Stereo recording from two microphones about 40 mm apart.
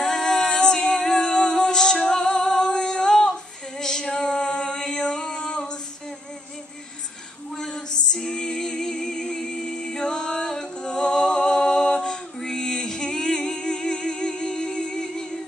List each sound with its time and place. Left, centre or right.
0.0 s music: centre
7.7 s music: centre